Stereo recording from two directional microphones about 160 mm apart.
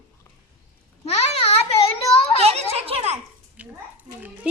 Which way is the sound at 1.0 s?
40° left (ahead or behind).